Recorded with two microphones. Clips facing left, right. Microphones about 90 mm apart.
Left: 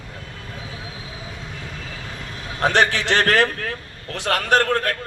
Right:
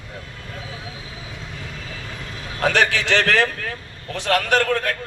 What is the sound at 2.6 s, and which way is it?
A man's voice, 30° left (ahead or behind).